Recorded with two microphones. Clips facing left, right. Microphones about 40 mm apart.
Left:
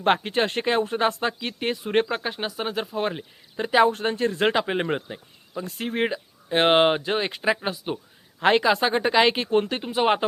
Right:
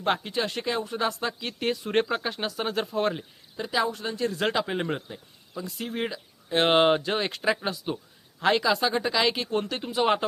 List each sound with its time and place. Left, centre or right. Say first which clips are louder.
0.0 s speech: left 5 dB; left
1.4 s speech: left 1 dB; centre
3.6 s speech: left 8 dB; left
6.5 s speech: left 2 dB; left
8.4 s speech: left 4 dB; left